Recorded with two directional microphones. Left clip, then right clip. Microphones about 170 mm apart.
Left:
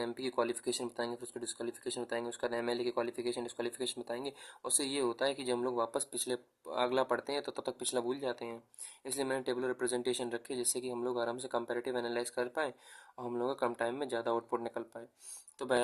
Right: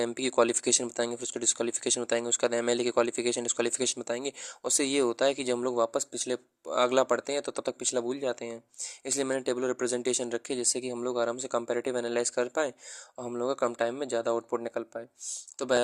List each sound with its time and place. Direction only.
0.0 s speech: 35° right (ahead or behind)